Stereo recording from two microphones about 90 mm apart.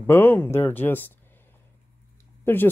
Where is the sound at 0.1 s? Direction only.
20° left (ahead or behind).